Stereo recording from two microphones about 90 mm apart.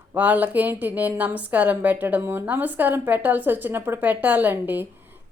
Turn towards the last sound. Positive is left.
turn(degrees=-20)  # may be behind; listen again after turning